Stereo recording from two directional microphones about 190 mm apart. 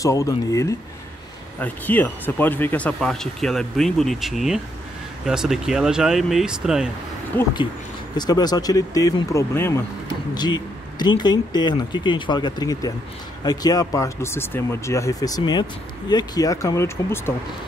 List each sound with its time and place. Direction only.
0.0 s speech: 15° left (ahead or behind); by 6.9 s 5° right (ahead or behind)
7.3 s speech: 10° left (ahead or behind)
8.2 s speech: 20° left (ahead or behind)